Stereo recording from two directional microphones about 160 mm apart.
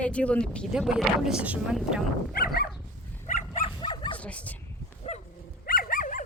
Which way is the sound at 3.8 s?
30° left (ahead or behind).